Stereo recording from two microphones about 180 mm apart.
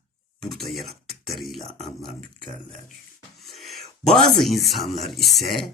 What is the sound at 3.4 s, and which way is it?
Speech, centre (ahead or behind).